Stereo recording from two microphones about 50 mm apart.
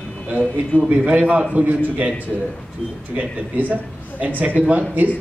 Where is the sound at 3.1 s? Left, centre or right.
Right.